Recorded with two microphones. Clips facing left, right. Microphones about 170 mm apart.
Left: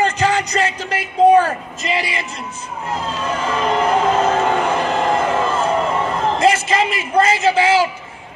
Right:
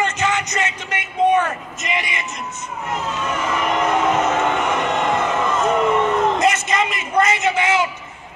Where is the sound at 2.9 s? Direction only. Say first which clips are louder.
Left 1 dB; 30° left (ahead or behind).